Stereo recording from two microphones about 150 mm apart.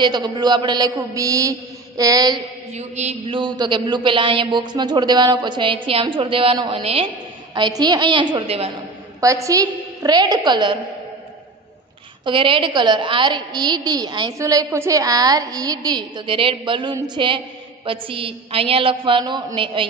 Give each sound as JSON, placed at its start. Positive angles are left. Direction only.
{"t": 0.0, "sound": "a woman's voice", "side_deg": -30}
{"t": 2.7, "sound": "a sound", "side_deg": -50}
{"t": 3.3, "sound": "a man's voice", "side_deg": -30}
{"t": 7.5, "sound": "a man's voice", "side_deg": -30}
{"t": 9.2, "sound": "a woman's voice", "side_deg": -20}
{"t": 12.3, "sound": "a woman's voice", "side_deg": -35}